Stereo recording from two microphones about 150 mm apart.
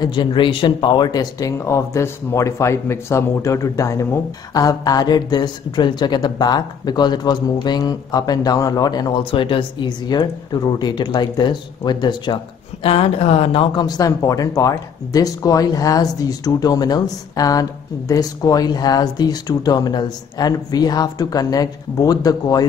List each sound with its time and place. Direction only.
0.0 s speech: 30° left (ahead or behind)